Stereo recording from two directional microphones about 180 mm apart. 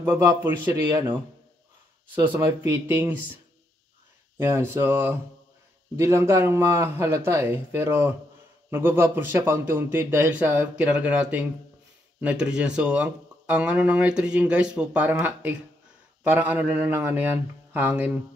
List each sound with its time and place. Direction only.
0.0 s speech: 15° right (ahead or behind)
2.3 s speech: 15° right (ahead or behind)
4.4 s speech: 15° right (ahead or behind)